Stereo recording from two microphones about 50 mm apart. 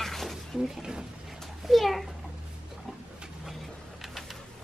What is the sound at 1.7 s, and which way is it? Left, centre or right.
Speech, centre.